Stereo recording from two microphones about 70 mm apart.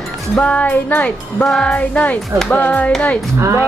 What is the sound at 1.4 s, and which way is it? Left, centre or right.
Music, centre.